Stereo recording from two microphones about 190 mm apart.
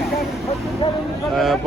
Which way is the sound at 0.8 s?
25° left (ahead or behind).